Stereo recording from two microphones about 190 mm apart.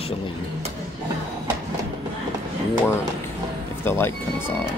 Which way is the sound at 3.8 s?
10° left (ahead or behind).